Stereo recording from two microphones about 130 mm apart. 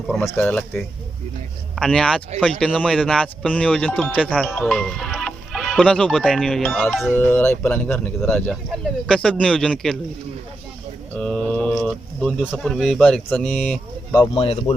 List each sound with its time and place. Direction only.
0.2 s speech: 15° left (ahead or behind)
1.7 s speech: 5° left (ahead or behind)
7.2 s speech: 15° left (ahead or behind)
11.2 s mantra: 5° left (ahead or behind)
12.6 s speech: centre (ahead or behind)
14.3 s speech: 45° left (ahead or behind)